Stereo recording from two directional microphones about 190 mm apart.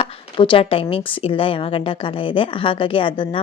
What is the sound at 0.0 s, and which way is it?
A woman's voice, 30° left (ahead or behind).